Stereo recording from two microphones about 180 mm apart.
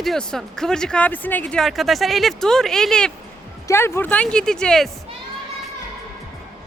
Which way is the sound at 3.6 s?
15° left (ahead or behind).